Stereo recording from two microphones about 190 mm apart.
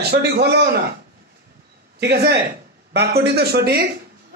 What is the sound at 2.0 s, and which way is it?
Speech, 60° right (ahead or behind).